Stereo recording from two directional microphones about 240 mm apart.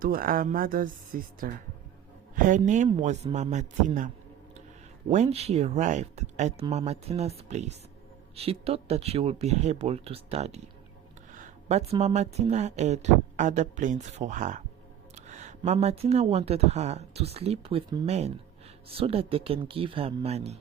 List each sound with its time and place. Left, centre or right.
0.0 s a man's voice: right